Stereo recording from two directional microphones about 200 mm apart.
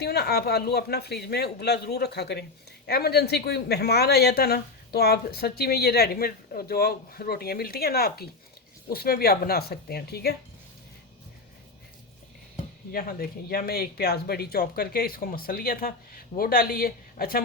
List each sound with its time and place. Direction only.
0.0 s speech: 55° left (ahead or behind)
12.9 s speech: 45° left (ahead or behind)